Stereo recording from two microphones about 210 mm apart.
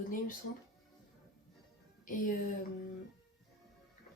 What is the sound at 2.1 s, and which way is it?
Speech, 40° left (ahead or behind).